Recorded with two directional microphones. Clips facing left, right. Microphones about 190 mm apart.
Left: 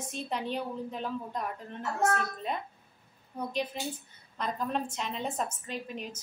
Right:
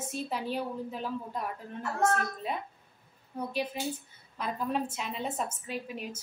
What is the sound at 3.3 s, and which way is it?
A woman's voice, 10° right (ahead or behind).